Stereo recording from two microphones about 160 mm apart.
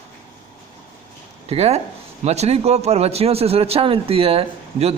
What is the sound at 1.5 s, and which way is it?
Speech, 40° right (ahead or behind).